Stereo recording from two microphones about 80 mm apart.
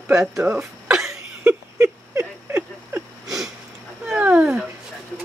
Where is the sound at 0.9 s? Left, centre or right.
Centre.